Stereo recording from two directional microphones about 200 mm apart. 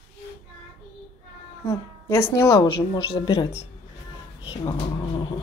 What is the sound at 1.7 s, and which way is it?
A woman's voice, 15° left (ahead or behind).